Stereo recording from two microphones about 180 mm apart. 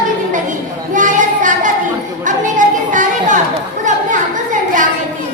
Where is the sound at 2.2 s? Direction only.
45° right (ahead or behind).